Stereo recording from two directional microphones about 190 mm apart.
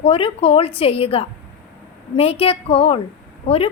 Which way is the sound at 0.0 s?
30° left (ahead or behind).